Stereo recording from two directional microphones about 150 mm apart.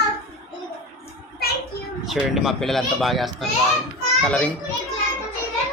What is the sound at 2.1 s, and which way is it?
A child's voice, centre (ahead or behind).